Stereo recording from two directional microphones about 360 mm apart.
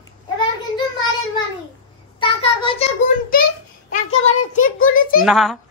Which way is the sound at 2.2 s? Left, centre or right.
Centre.